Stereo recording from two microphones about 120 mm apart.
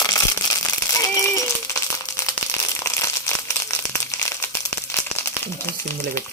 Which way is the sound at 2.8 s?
25° left (ahead or behind).